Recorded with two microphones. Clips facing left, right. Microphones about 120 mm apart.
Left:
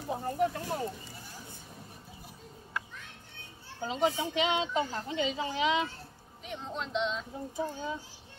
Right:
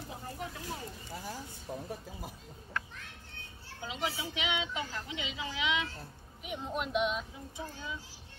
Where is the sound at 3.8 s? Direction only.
45° left (ahead or behind).